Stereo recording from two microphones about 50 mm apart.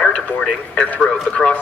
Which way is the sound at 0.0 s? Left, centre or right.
Left.